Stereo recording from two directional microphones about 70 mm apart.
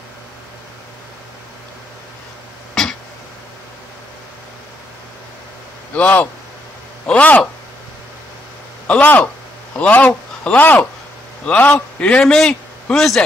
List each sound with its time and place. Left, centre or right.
2.7 s a sound: centre
5.9 s speech: left
8.8 s a man's voice: left; by 13.2 s centre